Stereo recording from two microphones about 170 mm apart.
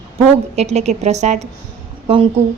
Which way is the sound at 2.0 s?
30° right (ahead or behind).